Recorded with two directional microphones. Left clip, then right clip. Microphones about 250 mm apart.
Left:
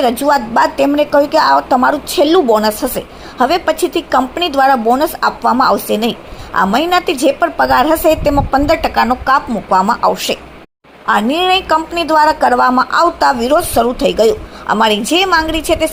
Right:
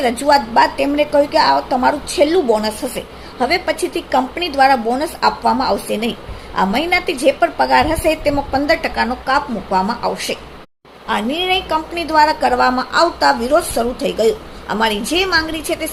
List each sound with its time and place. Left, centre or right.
0.0 s a woman's voice: centre
11.0 s a woman's voice: left